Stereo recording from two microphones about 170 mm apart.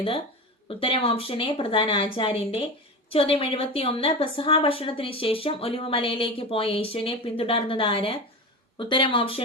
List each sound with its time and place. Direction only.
0.7 s a woman's voice: 35° left (ahead or behind)